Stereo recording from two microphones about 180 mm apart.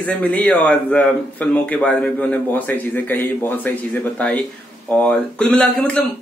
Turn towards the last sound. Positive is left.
turn(degrees=5)  # may be behind; listen again after turning